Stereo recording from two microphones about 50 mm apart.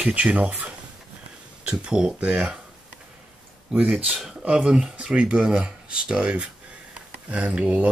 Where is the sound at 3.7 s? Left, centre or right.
Right.